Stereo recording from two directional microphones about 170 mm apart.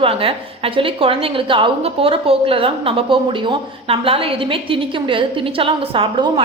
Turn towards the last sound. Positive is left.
turn(degrees=-30)  # may be behind; listen again after turning